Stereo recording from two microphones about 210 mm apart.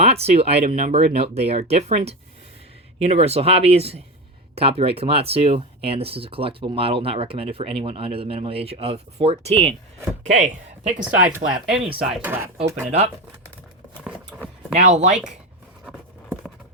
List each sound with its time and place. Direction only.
0.0 s speech: 30° right (ahead or behind)
11.0 s speech: 5° right (ahead or behind)
14.0 s clip-clop: 5° right (ahead or behind)
14.8 s speech: 35° right (ahead or behind)
15.8 s a sound: centre (ahead or behind)